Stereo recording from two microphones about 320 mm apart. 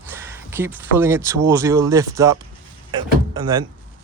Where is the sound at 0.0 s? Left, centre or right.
Centre.